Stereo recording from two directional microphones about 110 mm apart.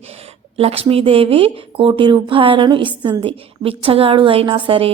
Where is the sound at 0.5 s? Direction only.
65° right (ahead or behind).